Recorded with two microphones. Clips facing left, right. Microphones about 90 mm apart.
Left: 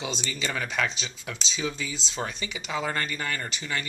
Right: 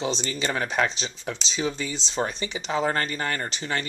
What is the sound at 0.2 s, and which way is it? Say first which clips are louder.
Speech: right 4 dB; 40° right (ahead or behind).